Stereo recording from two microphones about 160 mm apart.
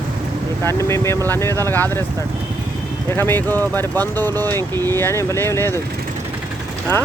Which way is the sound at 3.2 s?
10° left (ahead or behind).